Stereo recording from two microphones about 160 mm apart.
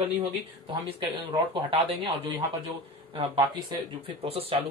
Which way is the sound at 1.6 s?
40° right (ahead or behind).